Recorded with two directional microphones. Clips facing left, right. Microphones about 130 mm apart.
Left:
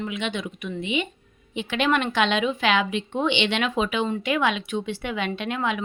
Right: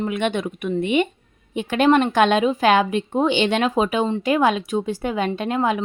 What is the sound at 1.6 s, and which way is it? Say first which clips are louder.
Speech: right 7 dB; 45° right (ahead or behind).